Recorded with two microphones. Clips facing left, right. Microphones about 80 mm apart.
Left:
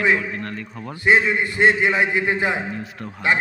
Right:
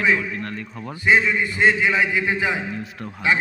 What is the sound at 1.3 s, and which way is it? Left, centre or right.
A man's voice, left.